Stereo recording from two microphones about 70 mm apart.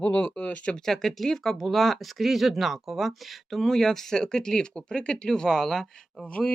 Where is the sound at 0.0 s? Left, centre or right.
Left.